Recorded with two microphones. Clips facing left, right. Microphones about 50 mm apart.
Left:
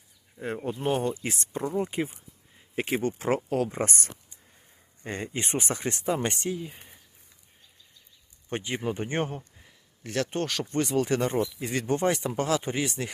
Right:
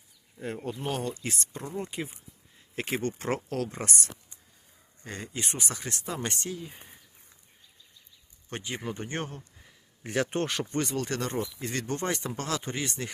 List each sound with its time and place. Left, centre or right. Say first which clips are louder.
0.4 s speech: left 4 dB; left
2.6 s speech: left 3 dB; centre
3.8 s speech: even; left; by 6.7 s centre
6.7 s a sound: even; centre
8.4 s speech: left 5 dB; centre
10.0 s a man's voice: even; centre
10.6 s speech: left 2 dB; centre
10.9 s speech: left 6 dB; centre